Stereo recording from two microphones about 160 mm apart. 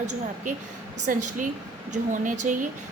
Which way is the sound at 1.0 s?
55° right (ahead or behind).